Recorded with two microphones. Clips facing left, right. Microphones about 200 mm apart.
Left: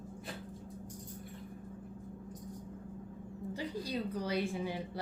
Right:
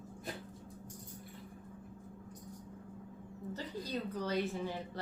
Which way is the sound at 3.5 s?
10° left (ahead or behind).